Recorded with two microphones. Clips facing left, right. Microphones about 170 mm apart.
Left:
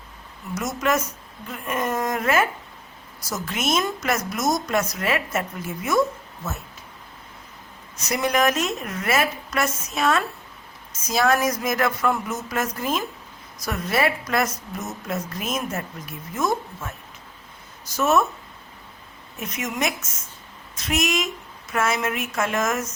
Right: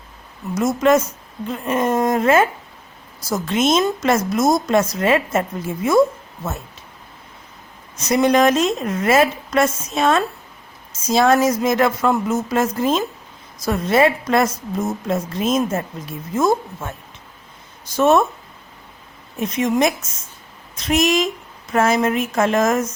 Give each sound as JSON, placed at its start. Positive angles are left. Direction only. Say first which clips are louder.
{"t": 0.5, "sound": "a woman's voice", "louder": "right 8 dB", "side_deg": -30}
{"t": 7.9, "sound": "a woman's voice", "louder": "right 7 dB", "side_deg": -30}
{"t": 17.9, "sound": "a woman's voice", "louder": "right 5 dB", "side_deg": -30}
{"t": 19.4, "sound": "a woman's voice", "louder": "right 9 dB", "side_deg": -30}